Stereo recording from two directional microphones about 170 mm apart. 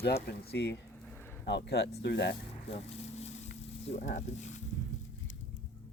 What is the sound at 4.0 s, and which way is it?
Speech, 45° left (ahead or behind).